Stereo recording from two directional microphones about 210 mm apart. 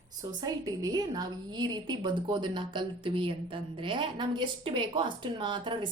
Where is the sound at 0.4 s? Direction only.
15° right (ahead or behind).